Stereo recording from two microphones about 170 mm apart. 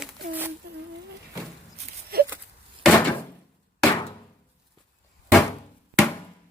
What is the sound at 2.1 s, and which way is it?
Wail, 65° right (ahead or behind).